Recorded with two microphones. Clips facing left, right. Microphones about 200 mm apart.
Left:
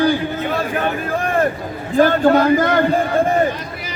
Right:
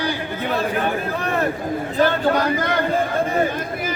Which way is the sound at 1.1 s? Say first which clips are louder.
Left 4 dB; 50° left (ahead or behind).